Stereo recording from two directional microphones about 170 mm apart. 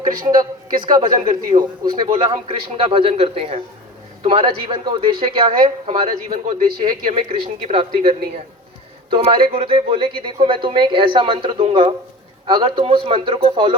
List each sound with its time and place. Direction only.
0.8 s a man's voice: 25° right (ahead or behind)
6.2 s speech: 50° right (ahead or behind)
7.3 s a man's voice: 35° right (ahead or behind)